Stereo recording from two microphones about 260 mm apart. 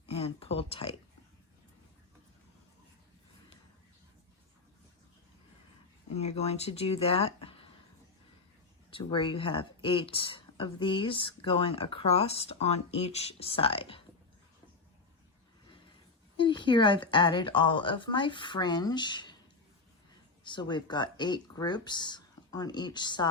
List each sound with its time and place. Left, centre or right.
0.1 s speech: left
6.1 s speech: left
8.9 s speech: centre
16.4 s a woman's voice: centre
20.4 s a woman's voice: centre